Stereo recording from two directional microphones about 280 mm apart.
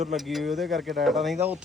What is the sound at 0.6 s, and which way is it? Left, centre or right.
Speech, right.